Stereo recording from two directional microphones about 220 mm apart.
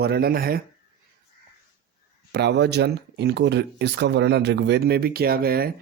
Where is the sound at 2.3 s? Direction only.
50° right (ahead or behind).